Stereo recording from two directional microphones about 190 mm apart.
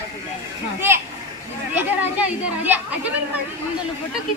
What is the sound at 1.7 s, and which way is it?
Speech, 10° right (ahead or behind).